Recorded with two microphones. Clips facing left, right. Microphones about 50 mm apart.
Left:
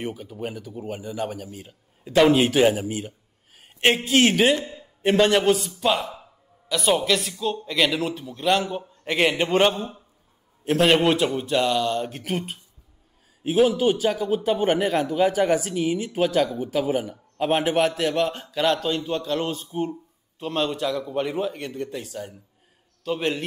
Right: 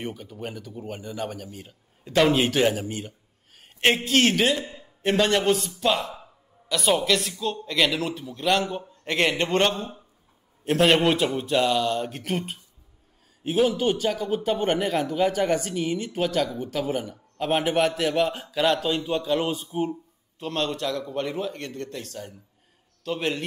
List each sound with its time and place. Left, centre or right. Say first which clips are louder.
0.0 s a man's voice: left 3 dB; centre
20.3 s a man's voice: left 2 dB; centre